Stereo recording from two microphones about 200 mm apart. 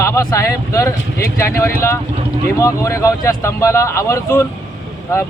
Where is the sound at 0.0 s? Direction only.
15° left (ahead or behind).